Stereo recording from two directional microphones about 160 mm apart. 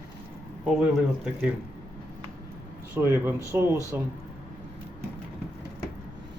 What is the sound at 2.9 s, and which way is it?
Speech, 15° right (ahead or behind).